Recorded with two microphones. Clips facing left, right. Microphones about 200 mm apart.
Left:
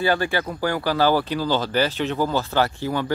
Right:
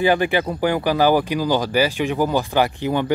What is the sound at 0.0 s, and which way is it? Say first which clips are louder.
Speech: right 4 dB; 15° right (ahead or behind).